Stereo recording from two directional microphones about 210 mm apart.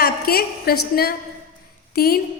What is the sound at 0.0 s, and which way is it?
Speech, 45° left (ahead or behind).